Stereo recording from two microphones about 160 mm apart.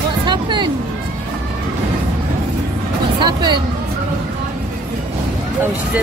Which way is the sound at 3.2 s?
25° right (ahead or behind).